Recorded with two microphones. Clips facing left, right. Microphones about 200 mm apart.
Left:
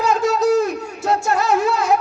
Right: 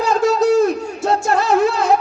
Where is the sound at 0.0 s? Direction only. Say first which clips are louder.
Right 2 dB; 30° right (ahead or behind).